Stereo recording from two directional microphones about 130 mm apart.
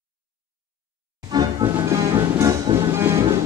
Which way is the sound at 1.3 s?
30° right (ahead or behind).